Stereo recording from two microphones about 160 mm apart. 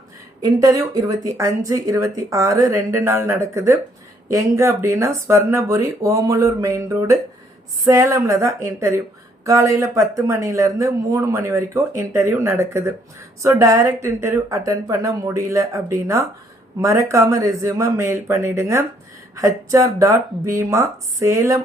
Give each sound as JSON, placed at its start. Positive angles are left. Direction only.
{"t": 0.4, "sound": "speech", "side_deg": -25}